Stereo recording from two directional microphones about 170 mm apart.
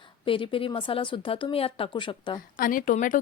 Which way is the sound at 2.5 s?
55° left (ahead or behind).